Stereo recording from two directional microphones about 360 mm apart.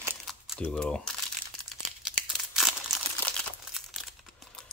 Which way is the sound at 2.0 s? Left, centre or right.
Centre.